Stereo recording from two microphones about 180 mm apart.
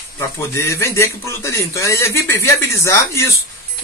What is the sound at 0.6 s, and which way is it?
Speech, 15° left (ahead or behind).